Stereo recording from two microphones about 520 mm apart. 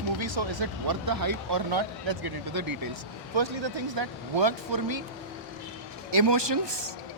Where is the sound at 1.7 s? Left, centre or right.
Right.